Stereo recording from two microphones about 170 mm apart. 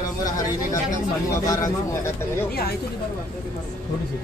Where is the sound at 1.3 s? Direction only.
20° left (ahead or behind).